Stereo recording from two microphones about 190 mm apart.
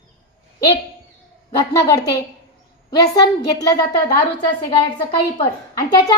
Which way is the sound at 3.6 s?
20° left (ahead or behind).